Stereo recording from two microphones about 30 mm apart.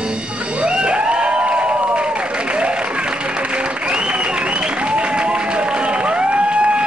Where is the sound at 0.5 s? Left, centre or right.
Right.